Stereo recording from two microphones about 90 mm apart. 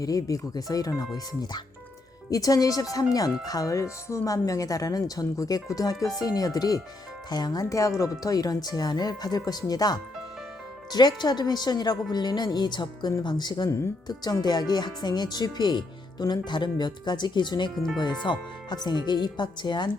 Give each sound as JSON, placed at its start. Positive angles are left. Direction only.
{"t": 0.0, "sound": "speech", "side_deg": 40}
{"t": 7.6, "sound": "speech", "side_deg": 35}